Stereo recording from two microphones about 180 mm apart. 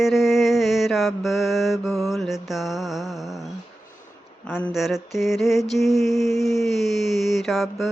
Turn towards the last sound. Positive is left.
turn(degrees=0)  # may be behind; listen again after turning